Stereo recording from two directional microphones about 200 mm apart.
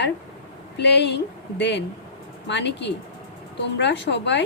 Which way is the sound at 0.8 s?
60° left (ahead or behind).